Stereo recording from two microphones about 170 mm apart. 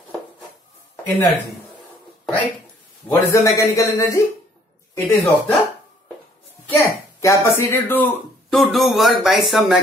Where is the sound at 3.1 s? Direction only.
20° left (ahead or behind).